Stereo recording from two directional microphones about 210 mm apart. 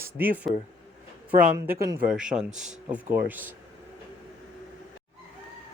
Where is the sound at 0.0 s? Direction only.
10° right (ahead or behind).